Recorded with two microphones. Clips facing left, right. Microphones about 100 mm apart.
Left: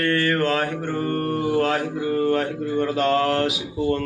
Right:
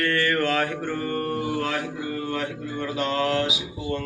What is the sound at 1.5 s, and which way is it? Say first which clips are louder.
Mantra: left 6 dB; 45° left (ahead or behind).